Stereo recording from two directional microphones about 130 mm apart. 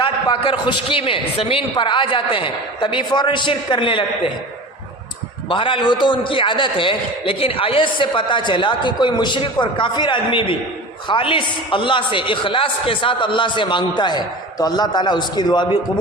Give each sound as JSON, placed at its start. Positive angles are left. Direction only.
{"t": 0.0, "sound": "a man's voice", "side_deg": 40}
{"t": 5.5, "sound": "a man's voice", "side_deg": 40}